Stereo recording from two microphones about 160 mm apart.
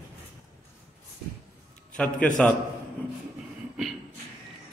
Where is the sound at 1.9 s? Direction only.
5° left (ahead or behind).